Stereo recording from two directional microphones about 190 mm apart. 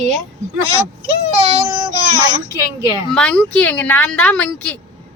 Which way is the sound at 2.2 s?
20° right (ahead or behind).